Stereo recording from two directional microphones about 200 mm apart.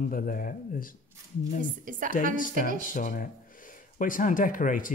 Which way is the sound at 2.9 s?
40° left (ahead or behind).